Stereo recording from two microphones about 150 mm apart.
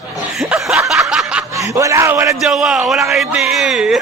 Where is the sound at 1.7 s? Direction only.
20° right (ahead or behind).